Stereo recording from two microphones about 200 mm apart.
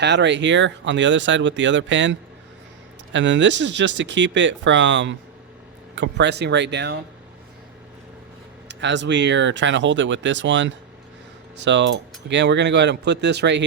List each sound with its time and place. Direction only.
0.0 s speech: 60° right (ahead or behind)
8.8 s speech: 65° right (ahead or behind)